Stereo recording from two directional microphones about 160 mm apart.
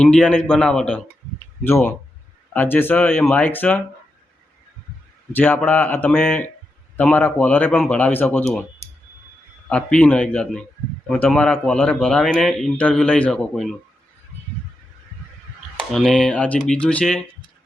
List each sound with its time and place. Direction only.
0.0 s speech: 5° left (ahead or behind)
5.3 s speech: 10° left (ahead or behind)
9.6 s speech: 5° left (ahead or behind)
15.9 s speech: centre (ahead or behind)